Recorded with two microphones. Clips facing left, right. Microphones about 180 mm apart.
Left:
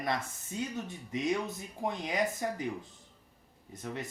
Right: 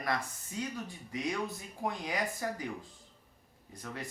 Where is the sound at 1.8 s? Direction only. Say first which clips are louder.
Left 3 dB; 20° left (ahead or behind).